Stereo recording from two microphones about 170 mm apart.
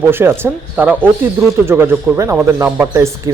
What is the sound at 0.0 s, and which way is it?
Speech, 15° right (ahead or behind).